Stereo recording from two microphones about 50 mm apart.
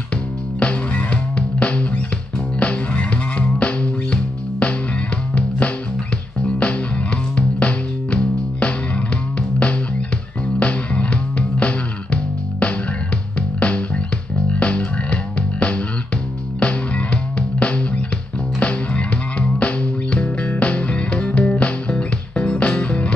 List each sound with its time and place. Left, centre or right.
0.6 s music: left
6.4 s music: left
16.5 s music: left